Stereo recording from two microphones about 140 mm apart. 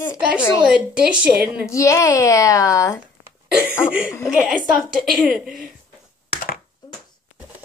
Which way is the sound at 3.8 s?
5° right (ahead or behind).